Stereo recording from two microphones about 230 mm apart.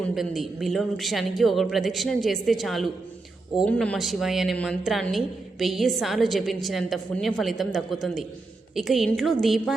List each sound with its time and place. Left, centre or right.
0.0 s a woman's voice: centre